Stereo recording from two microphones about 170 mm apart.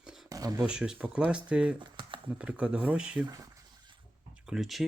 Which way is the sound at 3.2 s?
20° right (ahead or behind).